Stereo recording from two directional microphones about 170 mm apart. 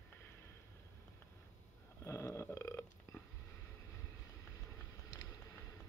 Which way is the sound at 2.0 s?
15° left (ahead or behind).